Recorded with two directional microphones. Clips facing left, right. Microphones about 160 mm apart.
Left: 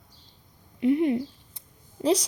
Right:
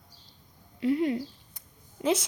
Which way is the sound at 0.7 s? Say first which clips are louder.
Left 4 dB; 20° left (ahead or behind).